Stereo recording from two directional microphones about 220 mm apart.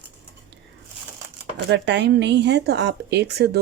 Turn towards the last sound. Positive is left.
turn(degrees=-45)  # may be behind; listen again after turning